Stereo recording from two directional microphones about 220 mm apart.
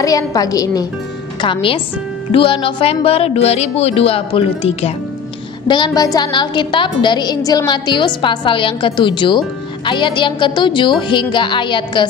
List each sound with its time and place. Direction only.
0.0 s a woman's voice: 15° left (ahead or behind)